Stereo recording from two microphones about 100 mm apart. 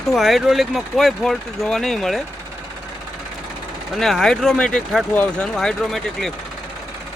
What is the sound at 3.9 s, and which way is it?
Speech, centre (ahead or behind).